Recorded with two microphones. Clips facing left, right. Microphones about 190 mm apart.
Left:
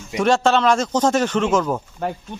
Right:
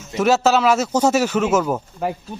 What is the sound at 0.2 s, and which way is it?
Speech, 5° right (ahead or behind).